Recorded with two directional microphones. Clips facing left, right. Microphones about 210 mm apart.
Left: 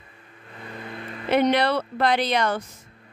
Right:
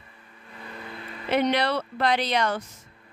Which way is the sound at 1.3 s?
55° left (ahead or behind).